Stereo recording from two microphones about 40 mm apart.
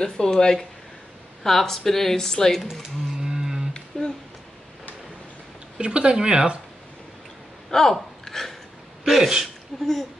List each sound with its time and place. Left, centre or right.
0.0 s speech: centre
2.7 s a sound: centre
3.9 s a sound: centre
5.8 s speech: right
7.7 s hiccup: centre
9.0 s speech: centre